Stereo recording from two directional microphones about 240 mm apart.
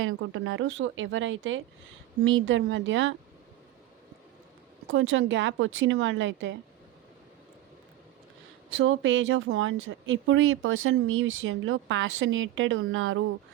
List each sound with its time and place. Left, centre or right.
0.0 s speech: right
4.9 s speech: right
8.7 s speech: right